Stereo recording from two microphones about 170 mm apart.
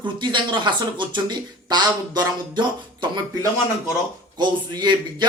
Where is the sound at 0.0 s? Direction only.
25° right (ahead or behind).